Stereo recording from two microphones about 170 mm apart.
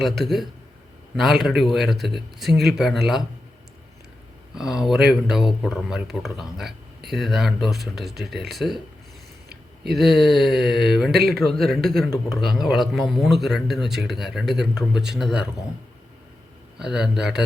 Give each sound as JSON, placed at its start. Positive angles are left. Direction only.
{"t": 0.0, "sound": "a man's voice", "side_deg": 0}
{"t": 4.5, "sound": "a man's voice", "side_deg": -5}
{"t": 9.8, "sound": "a man's voice", "side_deg": 0}
{"t": 11.1, "sound": "speech", "side_deg": -65}
{"t": 11.3, "sound": "a man's voice", "side_deg": 0}
{"t": 16.7, "sound": "a man's voice", "side_deg": -5}